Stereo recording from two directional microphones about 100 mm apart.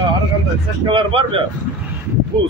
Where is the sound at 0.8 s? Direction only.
60° right (ahead or behind).